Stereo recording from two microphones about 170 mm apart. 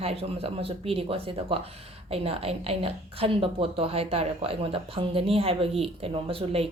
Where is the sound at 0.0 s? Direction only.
35° right (ahead or behind).